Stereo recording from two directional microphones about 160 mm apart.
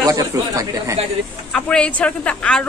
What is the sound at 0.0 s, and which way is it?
Speech, 20° right (ahead or behind).